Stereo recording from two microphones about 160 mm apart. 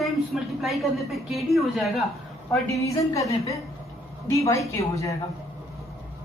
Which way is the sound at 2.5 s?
20° left (ahead or behind).